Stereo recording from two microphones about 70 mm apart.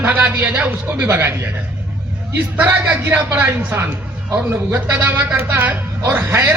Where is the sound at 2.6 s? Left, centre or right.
Right.